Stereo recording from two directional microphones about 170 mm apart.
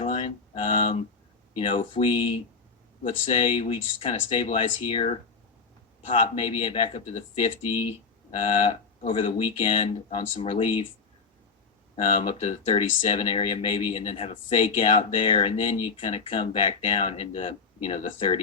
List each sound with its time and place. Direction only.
0.0 s speech: 40° left (ahead or behind)
12.0 s speech: 40° left (ahead or behind)